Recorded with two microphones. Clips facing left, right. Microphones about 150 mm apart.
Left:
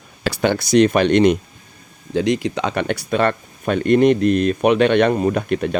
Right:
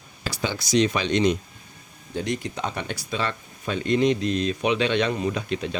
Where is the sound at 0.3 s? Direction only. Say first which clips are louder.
Left 9 dB; 60° left (ahead or behind).